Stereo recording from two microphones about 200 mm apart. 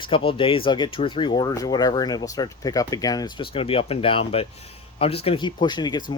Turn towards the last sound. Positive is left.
turn(degrees=20)  # may be behind; listen again after turning